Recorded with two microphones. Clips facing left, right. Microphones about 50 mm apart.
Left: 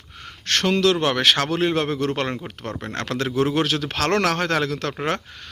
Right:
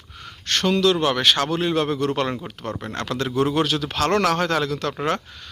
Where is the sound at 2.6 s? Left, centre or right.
Left.